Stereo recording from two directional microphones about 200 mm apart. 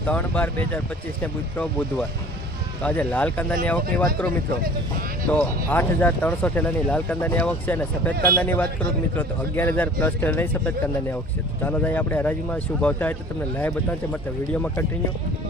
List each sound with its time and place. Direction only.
0.1 s speech: 10° left (ahead or behind)
5.3 s speech: 10° left (ahead or behind)
8.1 s speech: 50° right (ahead or behind)
8.4 s speech: 10° left (ahead or behind)
11.6 s speech: 10° left (ahead or behind)